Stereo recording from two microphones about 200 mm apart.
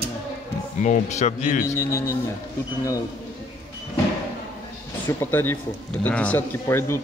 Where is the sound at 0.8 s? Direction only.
35° left (ahead or behind).